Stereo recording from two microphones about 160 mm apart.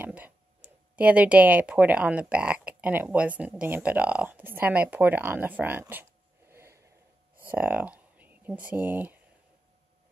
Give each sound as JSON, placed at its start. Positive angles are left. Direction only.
{"t": 0.0, "sound": "speech", "side_deg": -10}
{"t": 6.5, "sound": "a sound", "side_deg": -15}
{"t": 7.5, "sound": "speech", "side_deg": -10}